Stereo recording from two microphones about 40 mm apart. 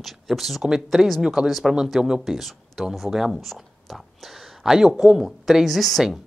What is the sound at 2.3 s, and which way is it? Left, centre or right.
Speech, centre.